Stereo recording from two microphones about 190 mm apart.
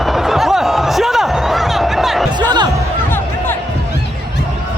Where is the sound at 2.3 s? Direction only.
25° right (ahead or behind).